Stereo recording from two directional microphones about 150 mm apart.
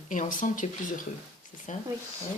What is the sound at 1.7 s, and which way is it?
Speech, 55° left (ahead or behind).